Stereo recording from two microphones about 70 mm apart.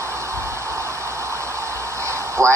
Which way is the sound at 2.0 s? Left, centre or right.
Right.